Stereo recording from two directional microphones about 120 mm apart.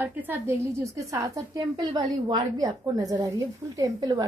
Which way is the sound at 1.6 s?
40° right (ahead or behind).